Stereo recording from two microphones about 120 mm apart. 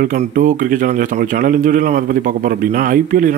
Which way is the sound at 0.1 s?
85° right.